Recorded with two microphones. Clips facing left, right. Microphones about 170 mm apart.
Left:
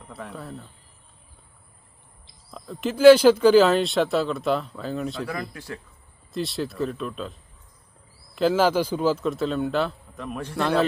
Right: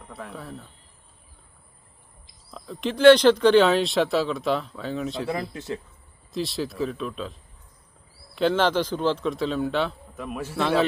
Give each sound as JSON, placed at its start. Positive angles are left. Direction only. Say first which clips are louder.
{"t": 0.1, "sound": "speech", "louder": "left 1 dB", "side_deg": 0}
{"t": 2.5, "sound": "speech", "louder": "left 1 dB", "side_deg": 0}
{"t": 5.3, "sound": "speech", "louder": "right 3 dB", "side_deg": -25}
{"t": 6.3, "sound": "speech", "louder": "even", "side_deg": 0}
{"t": 8.4, "sound": "speech", "louder": "left 1 dB", "side_deg": 5}